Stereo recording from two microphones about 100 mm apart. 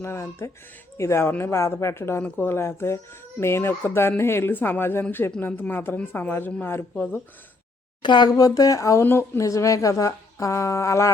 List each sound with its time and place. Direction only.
0.0 s a woman's voice: 25° left (ahead or behind)
8.0 s speech: 50° left (ahead or behind); by 11.1 s 30° left (ahead or behind)